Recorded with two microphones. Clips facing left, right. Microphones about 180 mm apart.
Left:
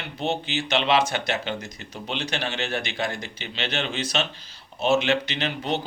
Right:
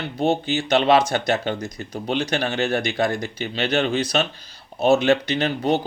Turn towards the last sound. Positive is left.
turn(degrees=-45)  # may be behind; listen again after turning